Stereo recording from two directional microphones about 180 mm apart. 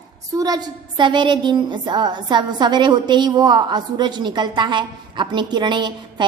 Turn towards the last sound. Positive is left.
turn(degrees=-25)  # may be behind; listen again after turning